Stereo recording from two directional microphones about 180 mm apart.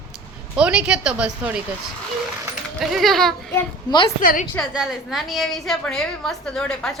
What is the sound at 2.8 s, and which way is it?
Speech, centre (ahead or behind).